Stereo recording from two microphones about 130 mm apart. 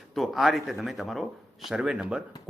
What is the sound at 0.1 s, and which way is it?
Speech, centre (ahead or behind).